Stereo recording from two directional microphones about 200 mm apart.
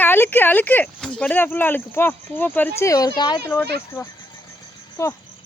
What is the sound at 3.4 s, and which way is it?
Speech, 10° left (ahead or behind).